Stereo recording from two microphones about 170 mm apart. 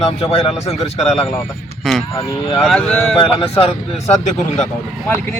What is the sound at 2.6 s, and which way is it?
Speech, 5° left (ahead or behind).